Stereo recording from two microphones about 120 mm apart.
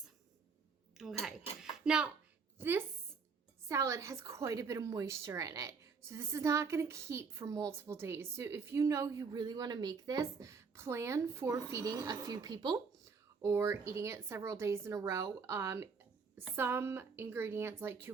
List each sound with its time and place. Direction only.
1.0 s speech: 5° right (ahead or behind)
1.6 s a sound: 5° right (ahead or behind)
2.6 s a woman's voice: 15° right (ahead or behind)
9.3 s a woman's voice: 35° right (ahead or behind)
13.4 s a woman's voice: 20° right (ahead or behind)